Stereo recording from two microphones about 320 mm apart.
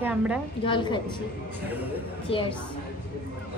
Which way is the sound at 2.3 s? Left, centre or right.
Centre.